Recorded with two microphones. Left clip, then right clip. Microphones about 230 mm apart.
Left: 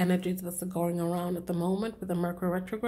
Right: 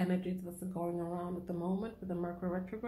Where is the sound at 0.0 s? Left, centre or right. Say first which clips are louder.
Left 7 dB; left.